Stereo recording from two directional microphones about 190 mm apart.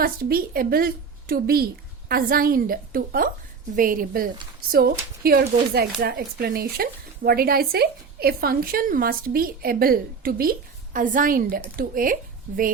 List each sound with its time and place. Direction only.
0.0 s a woman's voice: 50° right (ahead or behind)